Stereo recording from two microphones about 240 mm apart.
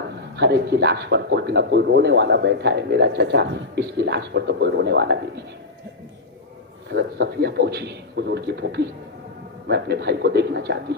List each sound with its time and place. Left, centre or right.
0.3 s speech: right
6.9 s speech: right